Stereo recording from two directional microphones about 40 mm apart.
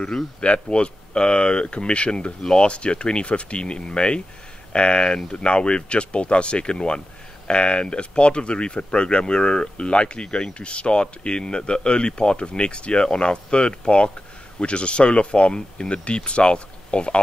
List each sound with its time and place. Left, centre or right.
0.4 s speech: left